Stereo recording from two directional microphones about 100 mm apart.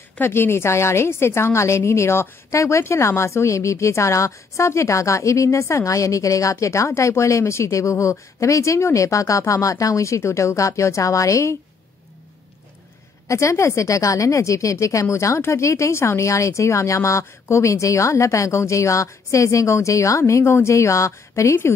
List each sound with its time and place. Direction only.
0.2 s a woman's voice: 25° left (ahead or behind)
13.3 s a woman's voice: 30° left (ahead or behind)